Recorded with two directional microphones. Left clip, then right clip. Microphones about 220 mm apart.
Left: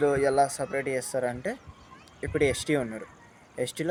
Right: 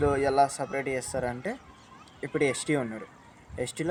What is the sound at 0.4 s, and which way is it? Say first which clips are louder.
Speech: even; centre (ahead or behind).